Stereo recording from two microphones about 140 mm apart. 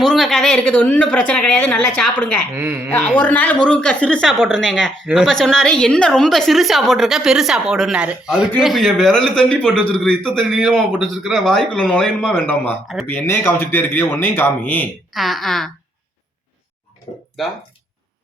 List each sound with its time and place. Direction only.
0.0 s speech: centre (ahead or behind)
2.6 s speech: 15° right (ahead or behind)
3.2 s a woman's voice: 10° left (ahead or behind)
15.1 s a woman's voice: centre (ahead or behind)
17.1 s a sound: 35° left (ahead or behind)